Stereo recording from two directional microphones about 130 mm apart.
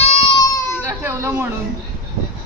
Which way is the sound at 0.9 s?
20° right (ahead or behind).